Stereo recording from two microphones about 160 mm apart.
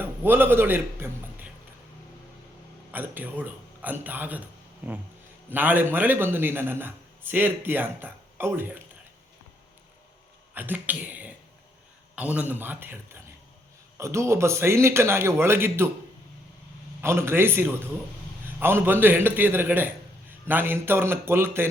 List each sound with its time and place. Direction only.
0.0 s a man's voice: 15° right (ahead or behind)
2.9 s a man's voice: 10° right (ahead or behind)
10.5 s a man's voice: 10° right (ahead or behind)
17.0 s a man's voice: 15° right (ahead or behind)